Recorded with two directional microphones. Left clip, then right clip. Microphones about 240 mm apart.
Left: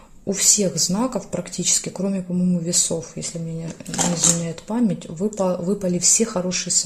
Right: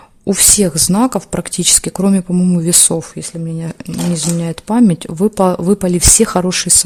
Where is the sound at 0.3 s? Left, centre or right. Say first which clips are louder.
Right 6 dB; right.